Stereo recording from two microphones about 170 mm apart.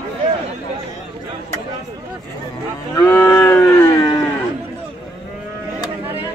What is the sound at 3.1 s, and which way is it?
Cattle, 15° left (ahead or behind).